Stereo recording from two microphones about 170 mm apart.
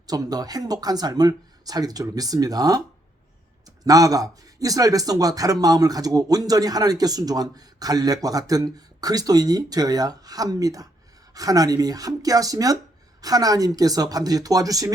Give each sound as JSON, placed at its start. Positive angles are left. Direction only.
{"t": 0.1, "sound": "speech", "side_deg": -20}
{"t": 3.8, "sound": "speech", "side_deg": -20}